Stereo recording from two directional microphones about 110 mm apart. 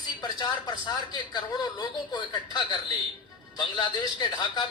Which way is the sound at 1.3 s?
40° left (ahead or behind).